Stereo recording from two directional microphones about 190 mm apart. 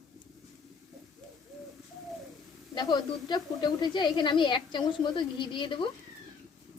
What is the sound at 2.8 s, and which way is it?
A woman's voice, 20° left (ahead or behind).